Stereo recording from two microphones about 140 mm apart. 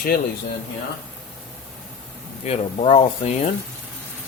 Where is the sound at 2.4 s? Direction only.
50° left (ahead or behind).